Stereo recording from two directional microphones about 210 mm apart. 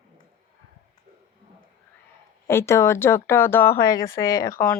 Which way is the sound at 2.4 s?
10° left (ahead or behind).